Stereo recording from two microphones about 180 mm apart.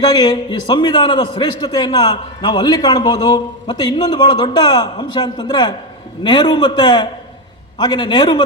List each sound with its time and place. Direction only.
0.2 s a man's voice: 25° left (ahead or behind)